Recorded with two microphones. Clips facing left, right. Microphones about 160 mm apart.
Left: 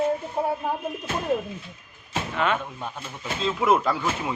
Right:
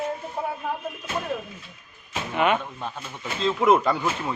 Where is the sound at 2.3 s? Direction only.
15° right (ahead or behind).